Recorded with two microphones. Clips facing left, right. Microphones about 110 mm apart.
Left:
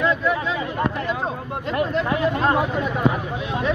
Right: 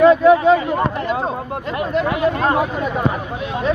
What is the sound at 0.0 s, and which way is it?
Speech, 65° right (ahead or behind).